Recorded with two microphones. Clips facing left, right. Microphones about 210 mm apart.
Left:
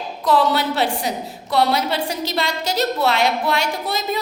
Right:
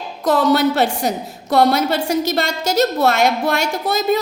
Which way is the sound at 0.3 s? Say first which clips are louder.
Right 3 dB; 45° right (ahead or behind).